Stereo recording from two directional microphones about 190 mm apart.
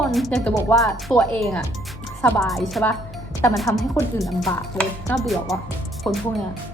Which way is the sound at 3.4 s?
10° left (ahead or behind).